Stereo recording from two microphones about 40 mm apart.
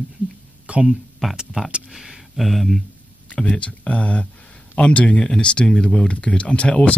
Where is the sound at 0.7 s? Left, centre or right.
Right.